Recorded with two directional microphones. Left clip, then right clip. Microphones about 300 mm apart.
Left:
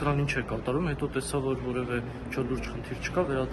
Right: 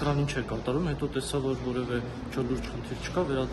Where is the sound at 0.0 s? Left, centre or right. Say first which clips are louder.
Left 1 dB; centre.